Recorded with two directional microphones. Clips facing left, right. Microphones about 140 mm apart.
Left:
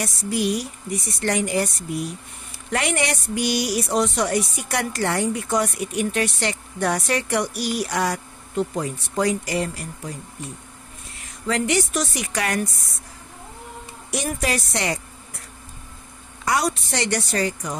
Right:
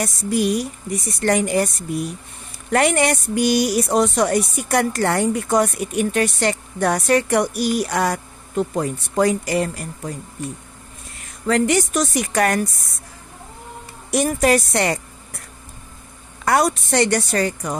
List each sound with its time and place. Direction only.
0.0 s speech: 50° right (ahead or behind)
2.7 s speech: 50° right (ahead or behind)
11.4 s speech: 50° right (ahead or behind)
14.1 s speech: 50° right (ahead or behind)
16.4 s speech: 50° right (ahead or behind)